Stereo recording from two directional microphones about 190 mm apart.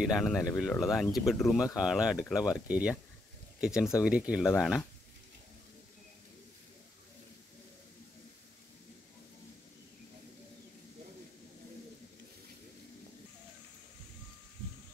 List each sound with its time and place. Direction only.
0.0 s speech: centre (ahead or behind)